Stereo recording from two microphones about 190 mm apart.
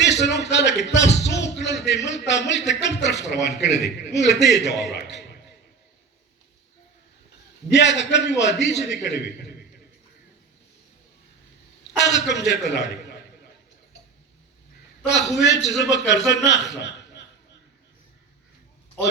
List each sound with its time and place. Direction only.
0.0 s music: 65° left (ahead or behind)
2.0 s a man's voice: 65° left (ahead or behind)
7.7 s a man's voice: 65° left (ahead or behind)
11.8 s a man's voice: 65° left (ahead or behind)
15.4 s a man's voice: 65° left (ahead or behind)
19.0 s a man's voice: 5° left (ahead or behind)